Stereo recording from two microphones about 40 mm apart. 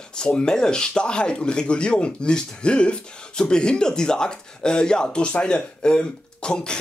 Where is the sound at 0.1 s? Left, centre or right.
Left.